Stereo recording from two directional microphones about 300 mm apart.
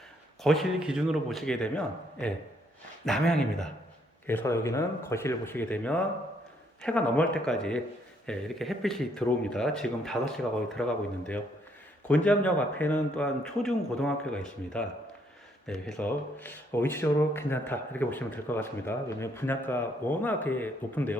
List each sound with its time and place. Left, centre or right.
0.4 s speech: centre